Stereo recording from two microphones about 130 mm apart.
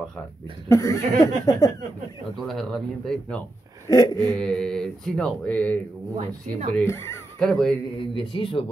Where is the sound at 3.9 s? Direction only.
30° left (ahead or behind).